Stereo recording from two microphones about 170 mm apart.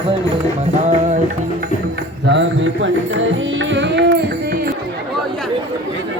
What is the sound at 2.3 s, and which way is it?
Mantra, 85° right.